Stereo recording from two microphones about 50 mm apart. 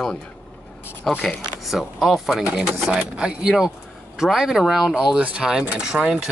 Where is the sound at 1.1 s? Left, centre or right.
Centre.